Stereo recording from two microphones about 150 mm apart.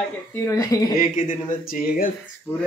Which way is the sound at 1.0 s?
65° left (ahead or behind).